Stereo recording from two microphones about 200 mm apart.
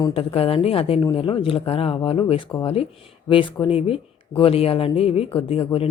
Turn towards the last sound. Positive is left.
turn(degrees=30)  # may be behind; listen again after turning